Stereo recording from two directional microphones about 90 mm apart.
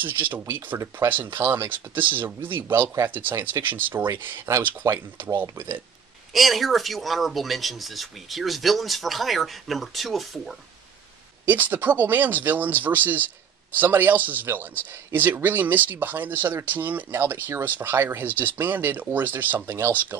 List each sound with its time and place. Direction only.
0.0 s speech: 20° right (ahead or behind)
6.3 s speech: centre (ahead or behind)
11.4 s speech: 20° right (ahead or behind)